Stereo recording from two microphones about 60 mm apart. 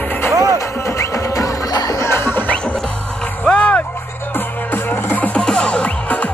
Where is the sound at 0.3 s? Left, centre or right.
Right.